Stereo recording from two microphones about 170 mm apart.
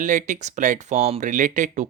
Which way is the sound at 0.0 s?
45° right (ahead or behind).